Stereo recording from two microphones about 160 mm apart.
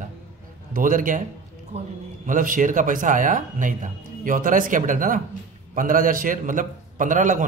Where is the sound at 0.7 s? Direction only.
55° right (ahead or behind).